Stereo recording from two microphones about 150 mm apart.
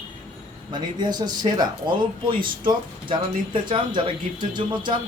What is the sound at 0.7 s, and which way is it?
Speech, 30° right (ahead or behind).